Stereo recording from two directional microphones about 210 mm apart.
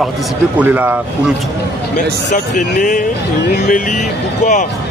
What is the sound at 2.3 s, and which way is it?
Speech, 35° left (ahead or behind).